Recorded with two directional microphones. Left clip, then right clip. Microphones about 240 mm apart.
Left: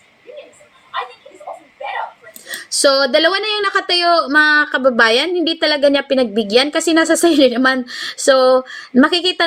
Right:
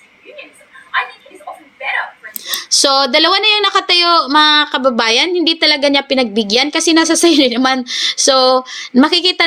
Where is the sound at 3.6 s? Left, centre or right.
Centre.